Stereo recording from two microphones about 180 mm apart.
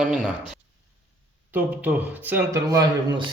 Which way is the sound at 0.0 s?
5° right (ahead or behind).